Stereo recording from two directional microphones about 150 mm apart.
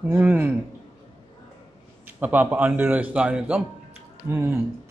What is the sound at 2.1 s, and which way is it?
A man's voice, 10° right (ahead or behind).